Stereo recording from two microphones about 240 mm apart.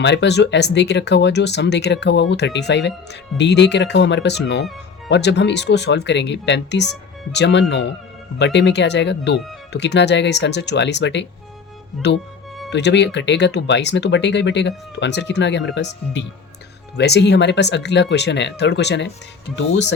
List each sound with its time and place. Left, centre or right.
0.0 s speech: left
12.7 s speech: left